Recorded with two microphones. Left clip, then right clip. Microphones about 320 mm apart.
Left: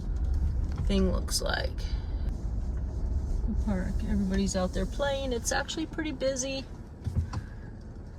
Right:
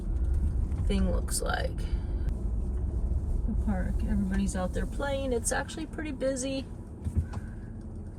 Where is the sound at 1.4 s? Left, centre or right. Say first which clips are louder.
Right 1 dB; centre.